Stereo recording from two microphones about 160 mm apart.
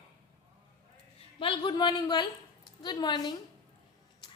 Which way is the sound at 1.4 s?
30° left (ahead or behind).